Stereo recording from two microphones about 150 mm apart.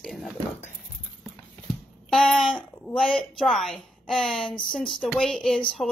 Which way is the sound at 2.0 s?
5° left (ahead or behind).